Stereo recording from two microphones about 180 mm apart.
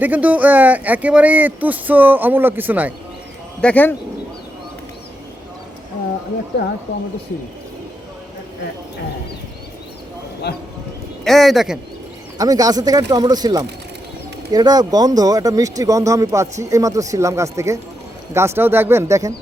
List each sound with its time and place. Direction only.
0.0 s speech: 10° right (ahead or behind)
3.6 s speech: 10° left (ahead or behind)
10.5 s speech: 65° left (ahead or behind)
11.2 s speech: centre (ahead or behind)
12.4 s speech: 20° right (ahead or behind)